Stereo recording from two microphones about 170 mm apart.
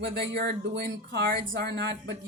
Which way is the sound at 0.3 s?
75° right (ahead or behind).